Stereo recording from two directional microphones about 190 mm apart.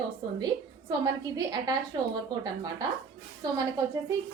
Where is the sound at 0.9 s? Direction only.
20° right (ahead or behind).